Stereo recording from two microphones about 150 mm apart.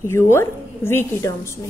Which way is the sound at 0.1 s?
15° left (ahead or behind).